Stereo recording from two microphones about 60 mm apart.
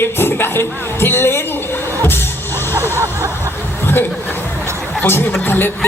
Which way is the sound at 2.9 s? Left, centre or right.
Right.